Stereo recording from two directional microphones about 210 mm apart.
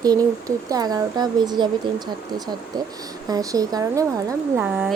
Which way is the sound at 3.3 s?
15° right (ahead or behind).